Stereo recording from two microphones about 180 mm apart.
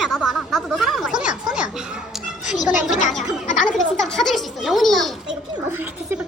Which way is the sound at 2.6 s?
5° right (ahead or behind).